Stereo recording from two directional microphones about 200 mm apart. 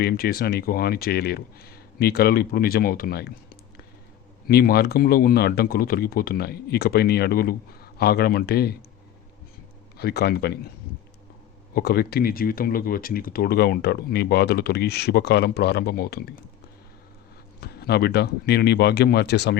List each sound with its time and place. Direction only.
0.0 s speech: 50° left (ahead or behind)
10.0 s speech: 50° left (ahead or behind)
11.7 s speech: 50° left (ahead or behind)
17.6 s speech: 55° left (ahead or behind)